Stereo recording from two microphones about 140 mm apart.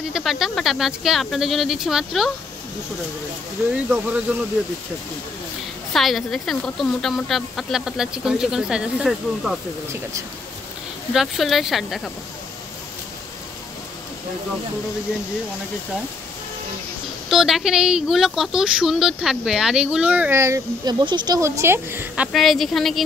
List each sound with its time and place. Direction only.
0.1 s speech: centre (ahead or behind)
3.7 s a woman's voice: 10° right (ahead or behind)
5.9 s speech: centre (ahead or behind)
11.1 s speech: centre (ahead or behind)
17.3 s speech: centre (ahead or behind); by 20.9 s 20° right (ahead or behind)
21.0 s speech: 35° right (ahead or behind)
21.4 s a woman's voice: 20° right (ahead or behind)
22.3 s speech: centre (ahead or behind)